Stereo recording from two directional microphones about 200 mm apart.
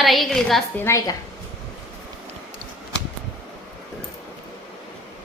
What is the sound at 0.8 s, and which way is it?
Speech, 15° left (ahead or behind).